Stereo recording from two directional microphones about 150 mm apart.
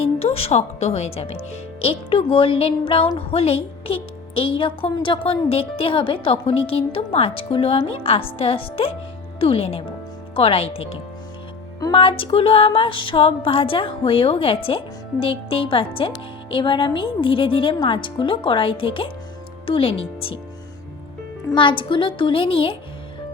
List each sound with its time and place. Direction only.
0.0 s speech: 40° left (ahead or behind)
21.5 s speech: 35° left (ahead or behind)